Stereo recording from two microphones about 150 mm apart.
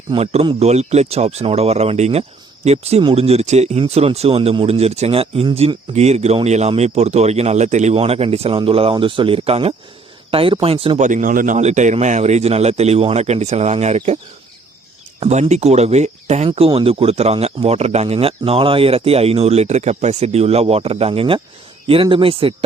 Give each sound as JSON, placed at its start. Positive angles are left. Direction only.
{"t": 0.1, "sound": "speech", "side_deg": -45}
{"t": 11.0, "sound": "speech", "side_deg": -60}
{"t": 15.3, "sound": "speech", "side_deg": -50}